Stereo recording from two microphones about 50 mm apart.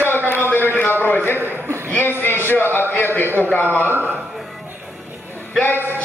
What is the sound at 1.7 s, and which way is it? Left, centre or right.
Speech, right.